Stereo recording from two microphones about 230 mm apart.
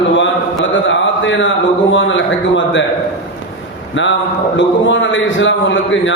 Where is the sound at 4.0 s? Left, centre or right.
Left.